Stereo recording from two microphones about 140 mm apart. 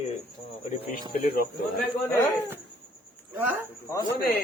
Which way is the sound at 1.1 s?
80° left.